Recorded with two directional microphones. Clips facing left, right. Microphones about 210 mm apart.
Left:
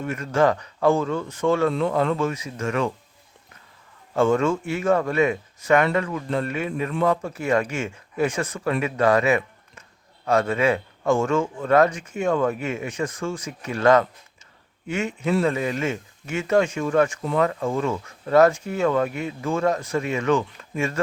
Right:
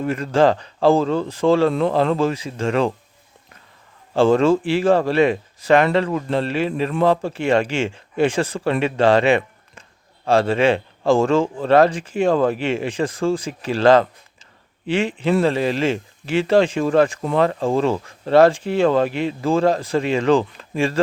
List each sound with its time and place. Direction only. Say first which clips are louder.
0.0 s speech: right 4 dB; 30° right (ahead or behind)
4.1 s speech: right 5 dB; 30° right (ahead or behind)
19.0 s speech: right 6 dB; 90° right
19.4 s speech: right 5 dB; 30° right (ahead or behind)